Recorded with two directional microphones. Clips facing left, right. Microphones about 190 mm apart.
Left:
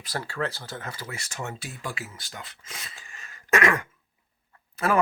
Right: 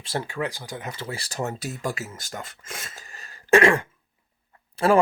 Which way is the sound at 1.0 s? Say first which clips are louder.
Right 6 dB; 30° right (ahead or behind).